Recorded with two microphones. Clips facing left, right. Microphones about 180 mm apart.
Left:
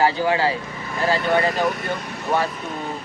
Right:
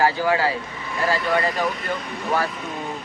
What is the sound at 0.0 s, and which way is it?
Speech, 25° left (ahead or behind).